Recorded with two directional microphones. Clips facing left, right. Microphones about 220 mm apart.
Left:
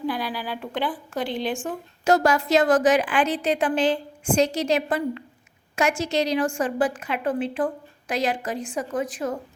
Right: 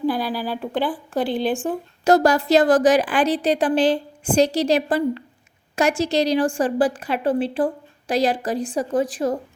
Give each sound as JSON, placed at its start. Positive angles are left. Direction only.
{"t": 0.1, "sound": "a woman's voice", "side_deg": -35}